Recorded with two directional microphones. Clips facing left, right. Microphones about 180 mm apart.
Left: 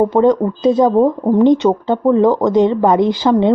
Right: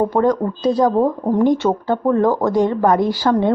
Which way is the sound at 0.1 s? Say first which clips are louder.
Left 4 dB; 20° left (ahead or behind).